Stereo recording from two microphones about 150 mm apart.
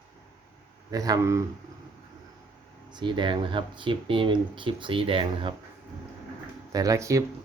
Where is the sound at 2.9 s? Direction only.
30° right (ahead or behind).